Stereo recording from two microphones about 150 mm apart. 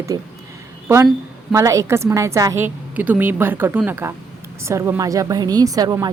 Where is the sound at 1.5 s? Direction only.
20° right (ahead or behind).